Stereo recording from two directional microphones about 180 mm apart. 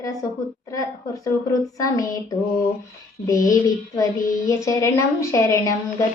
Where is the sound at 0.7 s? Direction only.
20° left (ahead or behind).